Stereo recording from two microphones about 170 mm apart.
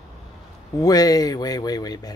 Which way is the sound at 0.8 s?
20° left (ahead or behind).